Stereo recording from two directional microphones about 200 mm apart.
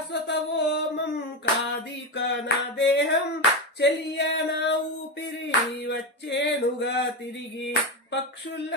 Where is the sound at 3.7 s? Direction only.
60° left (ahead or behind).